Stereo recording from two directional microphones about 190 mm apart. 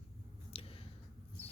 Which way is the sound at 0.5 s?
30° left (ahead or behind).